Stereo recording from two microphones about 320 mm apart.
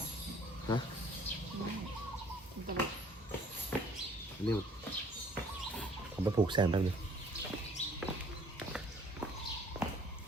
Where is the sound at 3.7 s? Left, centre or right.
Centre.